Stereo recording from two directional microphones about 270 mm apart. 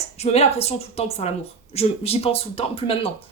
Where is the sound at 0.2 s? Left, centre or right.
Left.